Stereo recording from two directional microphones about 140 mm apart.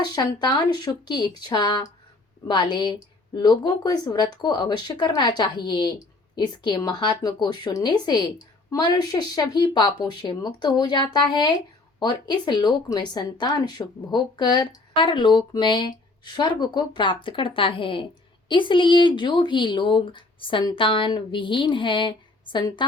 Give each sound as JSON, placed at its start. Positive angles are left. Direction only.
{"t": 0.0, "sound": "speech", "side_deg": 30}